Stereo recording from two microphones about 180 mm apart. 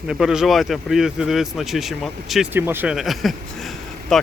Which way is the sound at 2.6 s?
10° right (ahead or behind).